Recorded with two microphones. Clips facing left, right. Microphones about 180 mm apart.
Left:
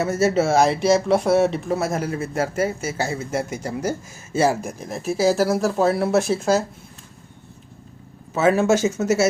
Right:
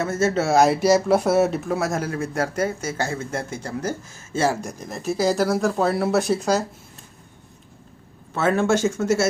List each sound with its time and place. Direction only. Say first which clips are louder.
0.0 s speech: left 2 dB; 10° left (ahead or behind)
8.3 s speech: left 3 dB; 5° left (ahead or behind)